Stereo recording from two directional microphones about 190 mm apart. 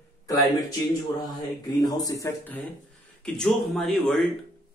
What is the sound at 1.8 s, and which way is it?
Speech, 20° left (ahead or behind).